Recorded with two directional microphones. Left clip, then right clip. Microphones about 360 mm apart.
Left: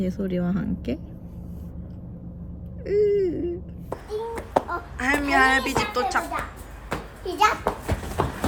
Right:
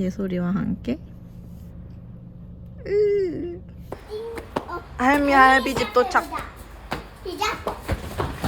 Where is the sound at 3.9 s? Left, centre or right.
Centre.